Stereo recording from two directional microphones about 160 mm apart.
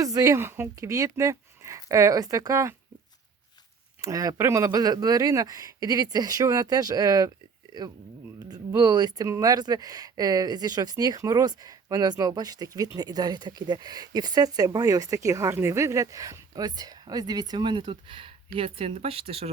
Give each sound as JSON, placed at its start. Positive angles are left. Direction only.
{"t": 0.0, "sound": "speech", "side_deg": -20}
{"t": 4.0, "sound": "speech", "side_deg": -20}
{"t": 8.4, "sound": "speech", "side_deg": -25}